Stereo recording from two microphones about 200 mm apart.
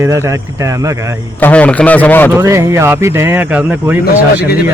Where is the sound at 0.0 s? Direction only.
15° right (ahead or behind).